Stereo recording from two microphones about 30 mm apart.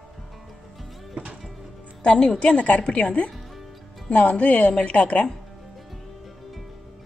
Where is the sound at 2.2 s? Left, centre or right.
Left.